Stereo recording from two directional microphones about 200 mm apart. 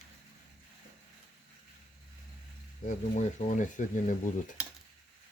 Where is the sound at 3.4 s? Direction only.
40° left (ahead or behind).